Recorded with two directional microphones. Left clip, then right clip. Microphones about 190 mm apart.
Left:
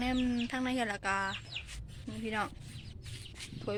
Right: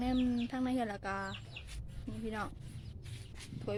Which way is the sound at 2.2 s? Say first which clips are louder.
Left 5 dB; 10° left (ahead or behind).